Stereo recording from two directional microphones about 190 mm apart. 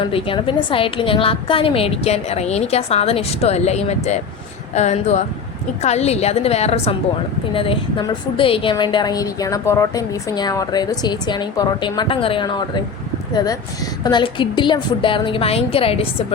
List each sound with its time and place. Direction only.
0.0 s a woman's voice: 30° left (ahead or behind)